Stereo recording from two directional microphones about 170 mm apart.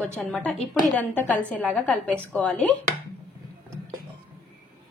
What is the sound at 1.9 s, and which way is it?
Speech, 5° left (ahead or behind).